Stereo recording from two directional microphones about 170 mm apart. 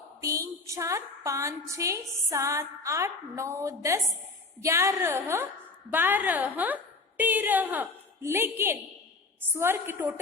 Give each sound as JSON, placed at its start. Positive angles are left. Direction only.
{"t": 0.2, "sound": "a woman's voice", "side_deg": -20}